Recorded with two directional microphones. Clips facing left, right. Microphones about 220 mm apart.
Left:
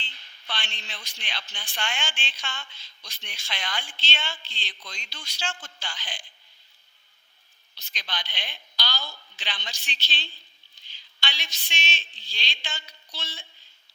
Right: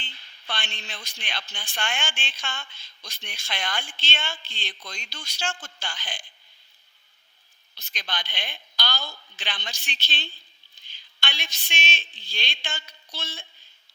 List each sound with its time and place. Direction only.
0.0 s a woman's voice: 50° right (ahead or behind)
7.8 s a woman's voice: 50° right (ahead or behind)